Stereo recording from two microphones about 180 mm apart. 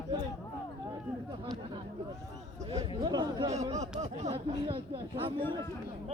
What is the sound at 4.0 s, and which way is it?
Speech, 40° right (ahead or behind).